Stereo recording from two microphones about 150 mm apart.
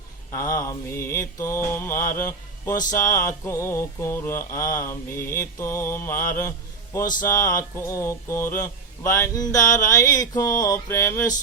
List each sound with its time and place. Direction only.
0.3 s mantra: 20° left (ahead or behind)